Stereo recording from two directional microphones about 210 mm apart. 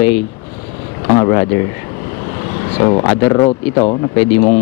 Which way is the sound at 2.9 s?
20° left (ahead or behind).